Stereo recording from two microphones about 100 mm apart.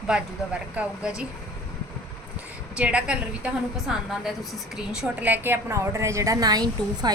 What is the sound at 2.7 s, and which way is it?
Speech, 10° right (ahead or behind).